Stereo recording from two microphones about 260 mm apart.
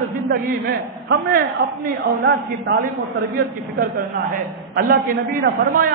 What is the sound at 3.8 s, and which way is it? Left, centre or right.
A man's voice, right.